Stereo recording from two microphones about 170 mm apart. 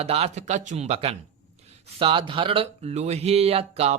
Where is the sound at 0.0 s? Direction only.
35° right (ahead or behind).